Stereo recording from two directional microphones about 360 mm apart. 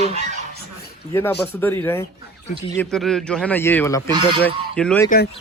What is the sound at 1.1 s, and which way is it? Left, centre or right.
Speech, centre.